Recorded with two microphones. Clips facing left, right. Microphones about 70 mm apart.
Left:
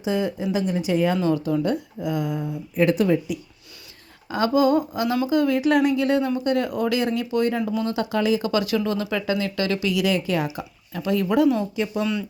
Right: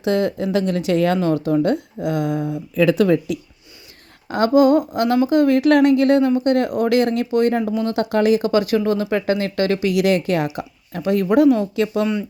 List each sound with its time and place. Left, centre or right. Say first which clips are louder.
0.0 s speech: right 5 dB; right
1.2 s speech: right 4 dB; right
1.7 s speech: right 4 dB; right
4.3 s speech: right 5 dB; right
7.6 s speech: right 3 dB; right
7.9 s speech: right 6 dB; right
8.4 s speech: right 5 dB; right
9.9 s speech: right 5 dB; right
10.6 s speech: right 4 dB; right